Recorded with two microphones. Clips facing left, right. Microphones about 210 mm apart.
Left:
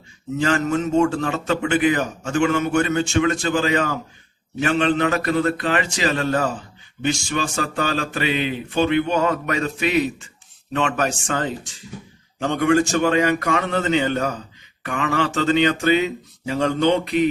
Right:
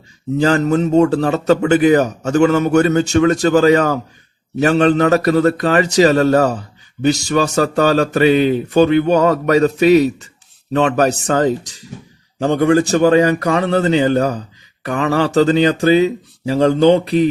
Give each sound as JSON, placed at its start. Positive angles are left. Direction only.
{"t": 0.3, "sound": "a man's voice", "side_deg": -35}